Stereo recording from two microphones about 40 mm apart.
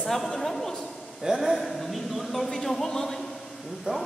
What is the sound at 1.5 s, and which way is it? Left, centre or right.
A man's voice, centre.